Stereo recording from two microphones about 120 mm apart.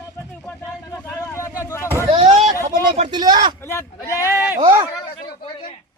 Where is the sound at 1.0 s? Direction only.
20° left (ahead or behind).